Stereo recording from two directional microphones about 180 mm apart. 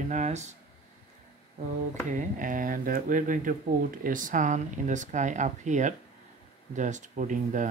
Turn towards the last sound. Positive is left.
turn(degrees=-45)  # may be behind; listen again after turning